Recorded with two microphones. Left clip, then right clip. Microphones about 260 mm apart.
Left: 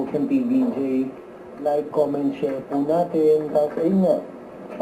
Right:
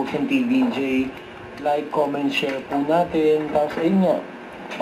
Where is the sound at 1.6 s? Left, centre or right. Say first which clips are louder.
Even; right.